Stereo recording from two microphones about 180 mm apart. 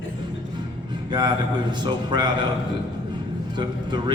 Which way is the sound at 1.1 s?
25° right (ahead or behind).